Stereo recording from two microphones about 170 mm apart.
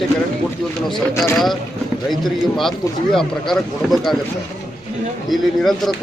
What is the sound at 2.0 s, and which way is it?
Speech, centre (ahead or behind).